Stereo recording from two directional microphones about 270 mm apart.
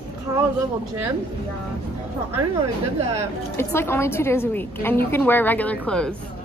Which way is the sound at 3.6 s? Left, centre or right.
Centre.